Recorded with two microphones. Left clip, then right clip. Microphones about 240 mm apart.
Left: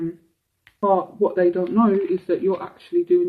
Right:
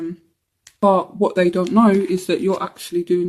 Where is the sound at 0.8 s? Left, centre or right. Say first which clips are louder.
Right 3 dB; right.